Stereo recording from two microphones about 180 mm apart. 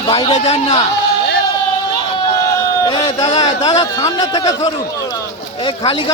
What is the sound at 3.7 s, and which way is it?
A man's voice, 20° left (ahead or behind).